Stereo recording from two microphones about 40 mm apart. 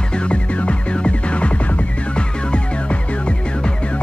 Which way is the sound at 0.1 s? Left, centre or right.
Left.